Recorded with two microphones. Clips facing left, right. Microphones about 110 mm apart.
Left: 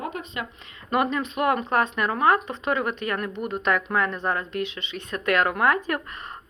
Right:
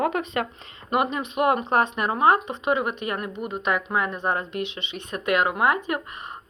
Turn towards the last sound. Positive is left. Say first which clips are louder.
# even
turn(degrees=-15)  # may be behind; listen again after turning